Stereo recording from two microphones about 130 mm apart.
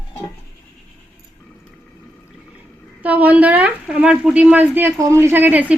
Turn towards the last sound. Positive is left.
turn(degrees=-15)  # may be behind; listen again after turning